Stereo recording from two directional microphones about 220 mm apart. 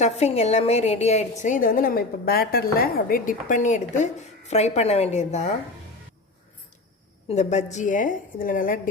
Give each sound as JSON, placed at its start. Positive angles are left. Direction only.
{"t": 0.0, "sound": "a woman's voice", "side_deg": 30}
{"t": 7.3, "sound": "a woman's voice", "side_deg": 30}